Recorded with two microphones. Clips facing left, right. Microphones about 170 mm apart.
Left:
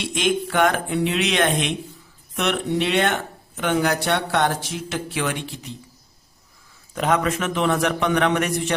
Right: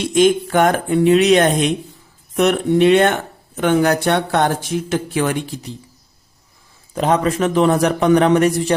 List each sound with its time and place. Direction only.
0.0 s speech: 45° right (ahead or behind)
6.9 s a man's voice: 30° right (ahead or behind)